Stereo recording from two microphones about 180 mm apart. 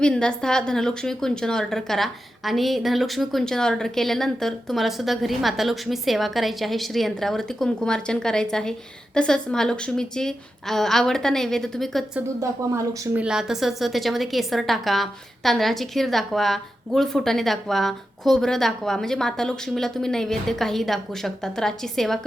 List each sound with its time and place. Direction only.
0.0 s a woman's voice: 5° left (ahead or behind)
12.4 s speech: 15° right (ahead or behind)
13.2 s a woman's voice: 5° right (ahead or behind)